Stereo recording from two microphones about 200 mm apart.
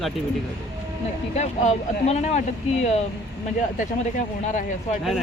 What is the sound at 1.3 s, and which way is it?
Speech, 35° left (ahead or behind).